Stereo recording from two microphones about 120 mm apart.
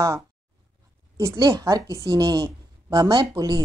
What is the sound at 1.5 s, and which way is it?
A woman's voice, 25° right (ahead or behind).